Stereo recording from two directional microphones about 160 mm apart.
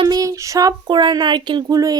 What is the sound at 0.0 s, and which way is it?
Speech, 25° right (ahead or behind).